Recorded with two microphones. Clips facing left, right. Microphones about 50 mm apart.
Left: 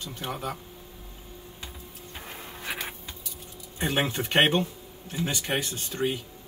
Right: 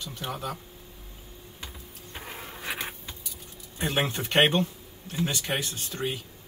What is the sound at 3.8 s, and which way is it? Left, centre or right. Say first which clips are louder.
Speech: left 1 dB; centre.